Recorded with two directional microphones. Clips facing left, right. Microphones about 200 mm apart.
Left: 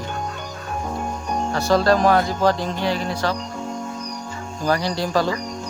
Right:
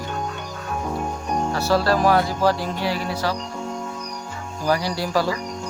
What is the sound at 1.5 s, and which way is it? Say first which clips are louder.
Speech: left 3 dB; 5° right (ahead or behind).